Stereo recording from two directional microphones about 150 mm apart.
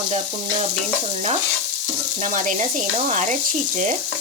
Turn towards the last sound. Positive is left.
turn(degrees=-55)  # may be behind; listen again after turning